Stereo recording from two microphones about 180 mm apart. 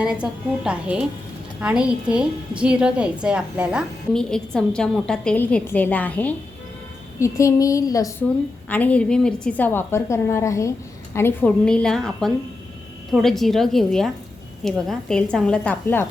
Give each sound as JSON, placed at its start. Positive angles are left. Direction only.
{"t": 0.0, "sound": "a woman's voice", "side_deg": -5}
{"t": 8.7, "sound": "a woman's voice", "side_deg": 10}